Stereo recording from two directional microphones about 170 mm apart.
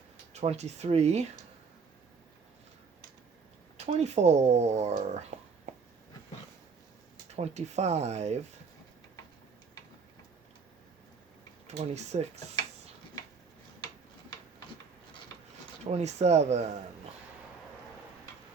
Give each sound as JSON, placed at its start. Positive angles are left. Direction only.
{"t": 0.3, "sound": "speech", "side_deg": -40}
{"t": 3.8, "sound": "speech", "side_deg": -40}
{"t": 7.3, "sound": "speech", "side_deg": -40}
{"t": 11.9, "sound": "speech", "side_deg": -40}
{"t": 15.9, "sound": "speech", "side_deg": -40}